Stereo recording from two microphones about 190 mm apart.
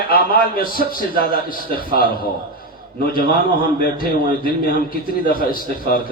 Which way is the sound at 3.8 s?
50° left (ahead or behind).